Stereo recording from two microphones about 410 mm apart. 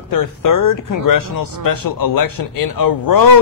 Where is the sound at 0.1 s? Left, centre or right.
Left.